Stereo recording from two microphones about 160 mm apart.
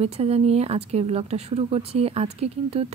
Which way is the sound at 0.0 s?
40° right (ahead or behind).